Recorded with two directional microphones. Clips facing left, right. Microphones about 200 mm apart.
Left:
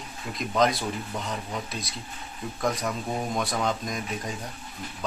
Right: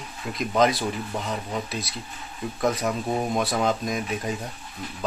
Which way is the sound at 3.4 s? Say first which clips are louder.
Right 4 dB; 5° right (ahead or behind).